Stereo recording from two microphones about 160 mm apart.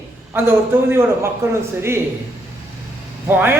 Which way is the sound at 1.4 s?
15° right (ahead or behind).